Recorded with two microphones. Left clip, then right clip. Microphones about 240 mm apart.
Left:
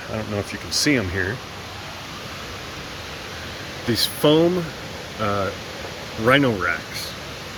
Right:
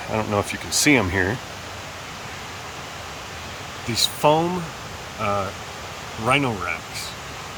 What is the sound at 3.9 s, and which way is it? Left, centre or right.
Speech, right.